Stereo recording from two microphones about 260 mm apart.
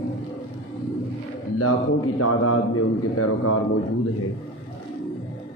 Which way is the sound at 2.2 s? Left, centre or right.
Left.